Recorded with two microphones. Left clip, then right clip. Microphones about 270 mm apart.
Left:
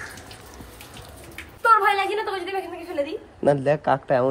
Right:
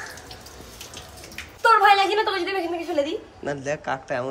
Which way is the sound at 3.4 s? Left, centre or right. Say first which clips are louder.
Left 11 dB; centre.